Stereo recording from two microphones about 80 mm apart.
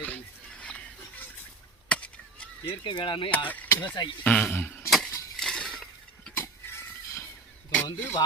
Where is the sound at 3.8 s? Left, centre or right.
Left.